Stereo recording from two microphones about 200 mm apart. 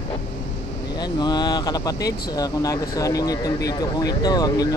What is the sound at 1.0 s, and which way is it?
Speech, 20° left (ahead or behind).